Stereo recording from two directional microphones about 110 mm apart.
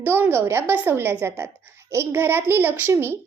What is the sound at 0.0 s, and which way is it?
A child's voice, 20° right (ahead or behind).